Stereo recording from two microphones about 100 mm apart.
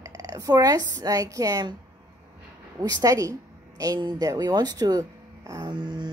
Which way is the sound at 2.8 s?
40° right (ahead or behind).